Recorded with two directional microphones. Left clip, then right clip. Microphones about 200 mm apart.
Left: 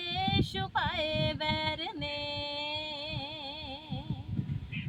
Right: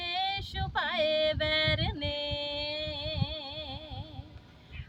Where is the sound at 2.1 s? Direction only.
50° right (ahead or behind).